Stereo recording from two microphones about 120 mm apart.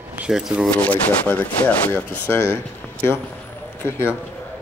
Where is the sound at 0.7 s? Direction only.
10° left (ahead or behind).